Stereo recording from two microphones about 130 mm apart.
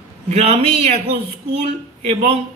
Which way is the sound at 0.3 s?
55° right (ahead or behind).